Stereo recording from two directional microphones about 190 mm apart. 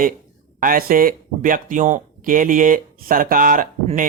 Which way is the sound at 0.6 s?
50° right (ahead or behind).